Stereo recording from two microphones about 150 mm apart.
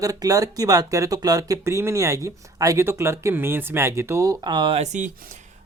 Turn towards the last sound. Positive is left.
turn(degrees=-50)  # may be behind; listen again after turning